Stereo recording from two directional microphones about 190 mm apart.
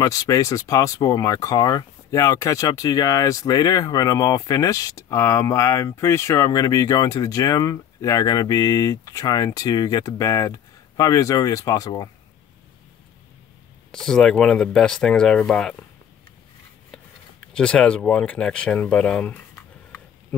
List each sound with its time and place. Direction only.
0.0 s speech: 20° left (ahead or behind)
13.9 s speech: 5° left (ahead or behind)
17.6 s speech: 5° left (ahead or behind)